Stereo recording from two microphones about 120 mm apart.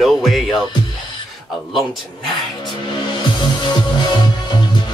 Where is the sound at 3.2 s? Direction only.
40° left (ahead or behind).